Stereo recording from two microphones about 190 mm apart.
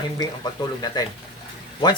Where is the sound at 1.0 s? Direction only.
20° left (ahead or behind).